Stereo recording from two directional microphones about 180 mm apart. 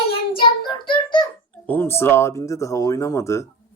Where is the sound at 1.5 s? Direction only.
10° left (ahead or behind).